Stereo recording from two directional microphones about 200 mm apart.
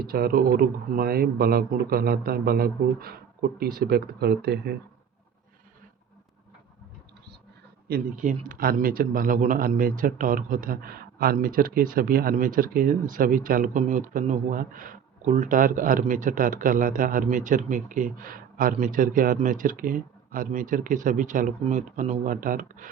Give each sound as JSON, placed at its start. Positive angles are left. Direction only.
{"t": 0.0, "sound": "a man's voice", "side_deg": -50}
{"t": 7.9, "sound": "a man's voice", "side_deg": -45}